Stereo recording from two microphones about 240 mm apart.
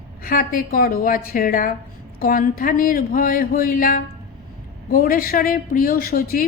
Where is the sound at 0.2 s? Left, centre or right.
Left.